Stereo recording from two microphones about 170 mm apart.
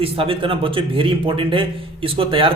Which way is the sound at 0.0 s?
30° right (ahead or behind).